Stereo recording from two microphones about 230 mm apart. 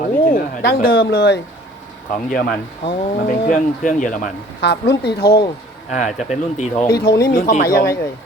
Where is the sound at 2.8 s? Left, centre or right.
Left.